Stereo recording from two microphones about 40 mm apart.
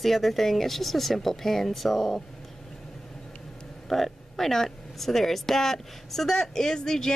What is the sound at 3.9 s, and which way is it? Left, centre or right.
Speech, centre.